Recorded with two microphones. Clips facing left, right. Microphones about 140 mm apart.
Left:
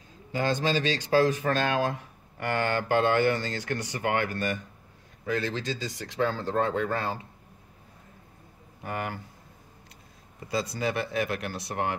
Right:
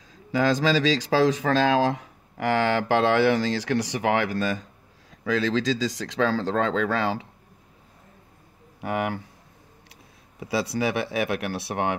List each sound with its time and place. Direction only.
0.1 s a man's voice: 90° right
8.8 s a man's voice: 90° right
10.4 s speech: 75° right (ahead or behind)